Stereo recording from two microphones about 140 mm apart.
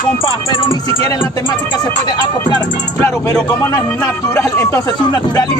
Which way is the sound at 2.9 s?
15° left (ahead or behind).